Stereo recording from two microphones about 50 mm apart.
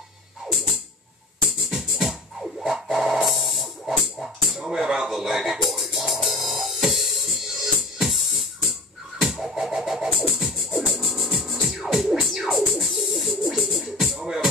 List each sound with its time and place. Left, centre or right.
1.5 s music: centre